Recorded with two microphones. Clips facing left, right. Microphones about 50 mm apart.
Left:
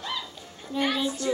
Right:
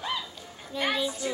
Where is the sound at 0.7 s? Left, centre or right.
Centre.